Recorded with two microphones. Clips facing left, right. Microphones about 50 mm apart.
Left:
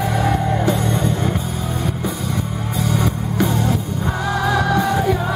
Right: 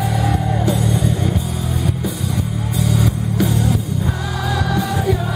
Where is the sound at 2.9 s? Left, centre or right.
Centre.